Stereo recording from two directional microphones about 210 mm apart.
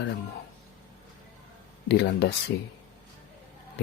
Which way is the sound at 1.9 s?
55° left (ahead or behind).